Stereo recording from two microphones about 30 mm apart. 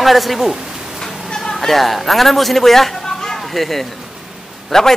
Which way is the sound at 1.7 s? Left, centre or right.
Centre.